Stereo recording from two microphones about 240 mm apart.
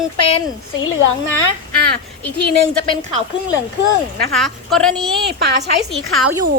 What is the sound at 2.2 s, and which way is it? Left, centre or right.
Speech, left.